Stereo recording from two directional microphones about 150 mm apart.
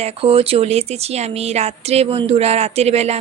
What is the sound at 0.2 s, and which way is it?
Speech, 40° right (ahead or behind).